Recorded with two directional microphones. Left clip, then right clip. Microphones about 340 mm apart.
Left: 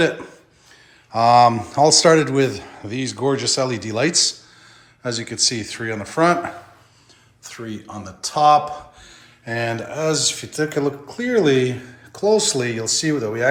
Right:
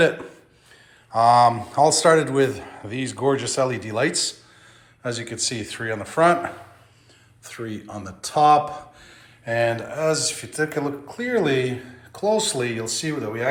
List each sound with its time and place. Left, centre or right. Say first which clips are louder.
1.1 s speech: left 2 dB; centre